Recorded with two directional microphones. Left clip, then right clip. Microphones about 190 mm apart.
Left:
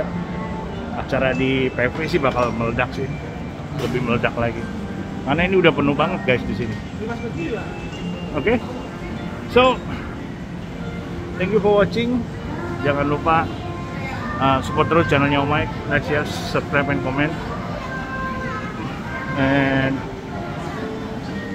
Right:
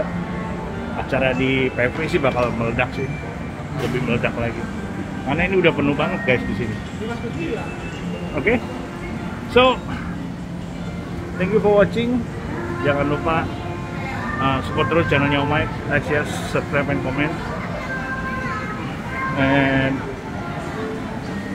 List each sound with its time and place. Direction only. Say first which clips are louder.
1.1 s speech: even; centre (ahead or behind)
4.1 s speech: left 4 dB; 20° left (ahead or behind)
8.4 s speech: even; 5° left (ahead or behind)
11.3 s speech: right 1 dB; centre (ahead or behind)
19.3 s speech: even; centre (ahead or behind)